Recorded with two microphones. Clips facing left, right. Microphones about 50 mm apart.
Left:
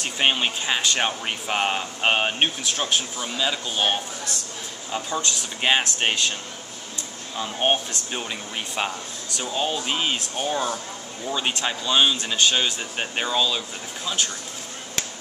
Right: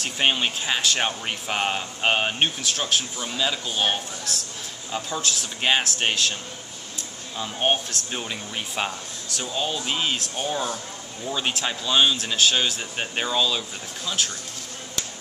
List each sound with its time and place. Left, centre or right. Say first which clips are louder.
0.0 s speech: left 1 dB; centre